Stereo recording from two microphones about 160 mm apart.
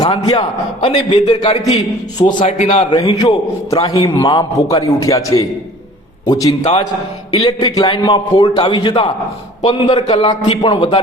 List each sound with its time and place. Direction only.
0.0 s a man's voice: 25° left (ahead or behind); by 2.8 s 45° left (ahead or behind)
2.9 s a man's voice: 30° left (ahead or behind)